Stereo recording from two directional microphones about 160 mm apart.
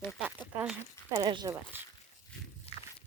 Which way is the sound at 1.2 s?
25° right (ahead or behind).